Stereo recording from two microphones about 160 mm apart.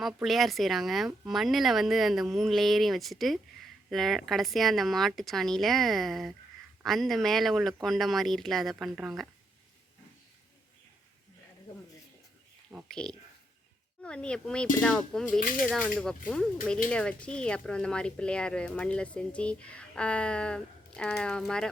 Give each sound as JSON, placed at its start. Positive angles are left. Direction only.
{"t": 0.0, "sound": "speech", "side_deg": 0}
{"t": 12.9, "sound": "speech", "side_deg": 5}